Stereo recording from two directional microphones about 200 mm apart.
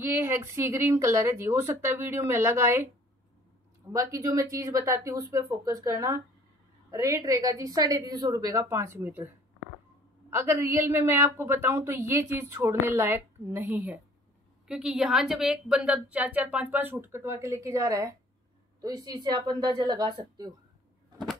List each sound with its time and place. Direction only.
0.0 s a woman's voice: 10° right (ahead or behind)
3.9 s a woman's voice: 15° right (ahead or behind)
10.3 s a woman's voice: 10° right (ahead or behind)